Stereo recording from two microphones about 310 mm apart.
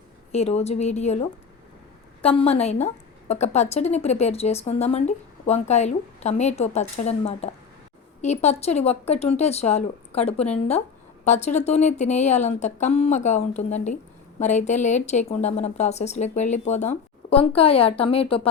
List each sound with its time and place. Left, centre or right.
0.3 s a woman's voice: left
2.2 s a woman's voice: centre